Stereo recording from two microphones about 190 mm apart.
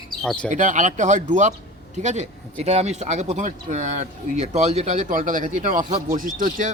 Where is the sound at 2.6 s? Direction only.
35° right (ahead or behind).